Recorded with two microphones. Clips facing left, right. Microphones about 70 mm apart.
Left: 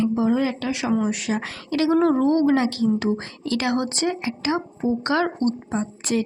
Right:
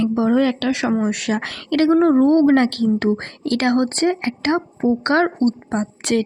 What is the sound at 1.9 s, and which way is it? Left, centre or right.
Speech, right.